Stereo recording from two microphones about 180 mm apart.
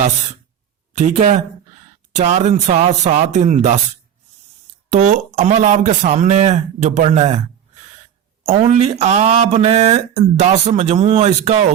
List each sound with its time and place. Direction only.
0.9 s speech: 40° right (ahead or behind)
4.9 s speech: 40° right (ahead or behind)
8.4 s speech: 40° right (ahead or behind)